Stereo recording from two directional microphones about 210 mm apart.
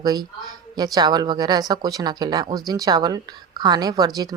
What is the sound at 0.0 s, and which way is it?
Speech, 20° right (ahead or behind).